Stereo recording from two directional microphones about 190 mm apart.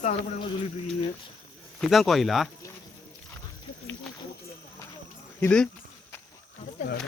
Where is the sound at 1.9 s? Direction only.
Centre (ahead or behind).